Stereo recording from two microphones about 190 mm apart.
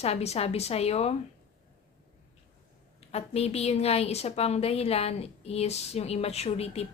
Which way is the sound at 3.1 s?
35° left (ahead or behind).